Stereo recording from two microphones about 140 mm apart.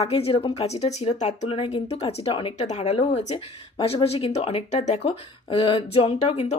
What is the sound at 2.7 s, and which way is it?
Speech, 55° left (ahead or behind).